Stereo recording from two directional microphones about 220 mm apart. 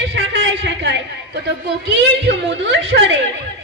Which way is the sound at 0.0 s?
55° right (ahead or behind).